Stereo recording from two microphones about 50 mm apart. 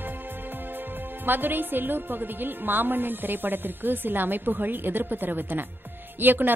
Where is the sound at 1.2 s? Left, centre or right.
Right.